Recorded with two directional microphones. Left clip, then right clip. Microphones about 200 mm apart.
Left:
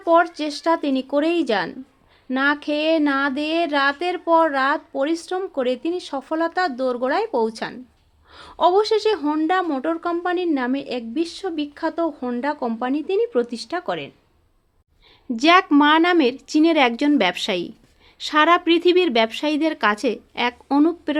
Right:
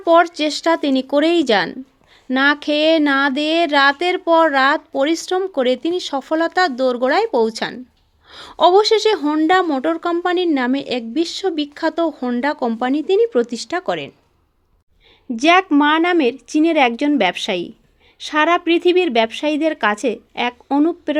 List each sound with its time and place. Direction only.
0.0 s a woman's voice: 40° right (ahead or behind)
15.3 s speech: 20° right (ahead or behind)